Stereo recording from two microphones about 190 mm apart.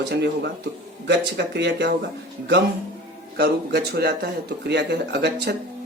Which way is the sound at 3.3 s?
60° right (ahead or behind).